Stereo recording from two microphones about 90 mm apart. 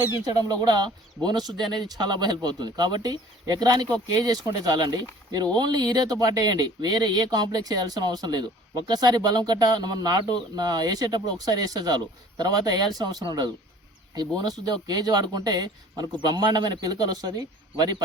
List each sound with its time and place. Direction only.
0.3 s speech: 45° right (ahead or behind)